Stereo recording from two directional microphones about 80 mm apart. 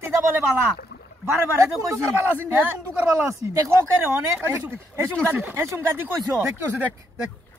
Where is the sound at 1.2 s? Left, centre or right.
Right.